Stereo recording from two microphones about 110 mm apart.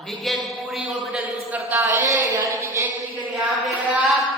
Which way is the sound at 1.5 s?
15° right (ahead or behind).